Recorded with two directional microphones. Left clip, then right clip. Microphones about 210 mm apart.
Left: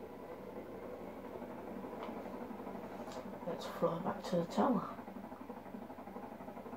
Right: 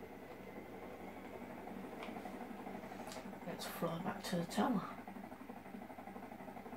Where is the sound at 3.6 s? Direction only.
20° right (ahead or behind).